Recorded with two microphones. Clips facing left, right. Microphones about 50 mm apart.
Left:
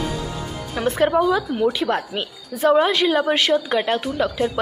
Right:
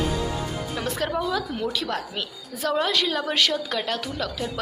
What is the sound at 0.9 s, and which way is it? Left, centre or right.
A woman's voice, left.